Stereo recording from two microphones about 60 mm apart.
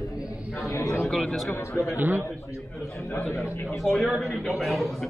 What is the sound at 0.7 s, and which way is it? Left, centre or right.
Speech, left.